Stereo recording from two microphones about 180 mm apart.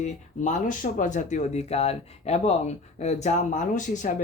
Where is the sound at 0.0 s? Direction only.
45° left (ahead or behind).